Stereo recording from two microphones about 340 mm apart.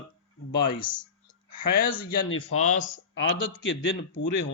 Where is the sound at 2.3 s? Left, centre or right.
Left.